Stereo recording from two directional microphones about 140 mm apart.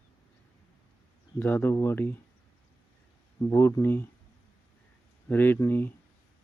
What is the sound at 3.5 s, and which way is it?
Speech, 20° left (ahead or behind).